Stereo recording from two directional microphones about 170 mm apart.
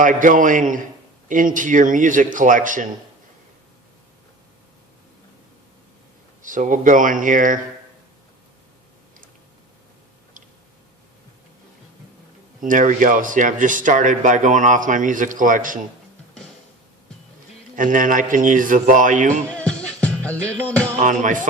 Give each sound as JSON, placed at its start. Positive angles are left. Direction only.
{"t": 0.0, "sound": "speech", "side_deg": -50}
{"t": 6.4, "sound": "speech", "side_deg": -50}
{"t": 12.6, "sound": "speech", "side_deg": -50}
{"t": 17.7, "sound": "speech", "side_deg": -50}
{"t": 19.5, "sound": "music", "side_deg": 5}
{"t": 21.0, "sound": "speech", "side_deg": -50}